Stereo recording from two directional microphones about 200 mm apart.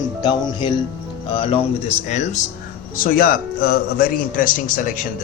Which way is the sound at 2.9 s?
45° left (ahead or behind).